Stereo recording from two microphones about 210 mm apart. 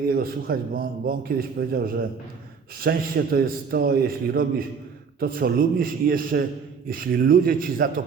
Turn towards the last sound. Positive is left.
turn(degrees=-40)  # may be behind; listen again after turning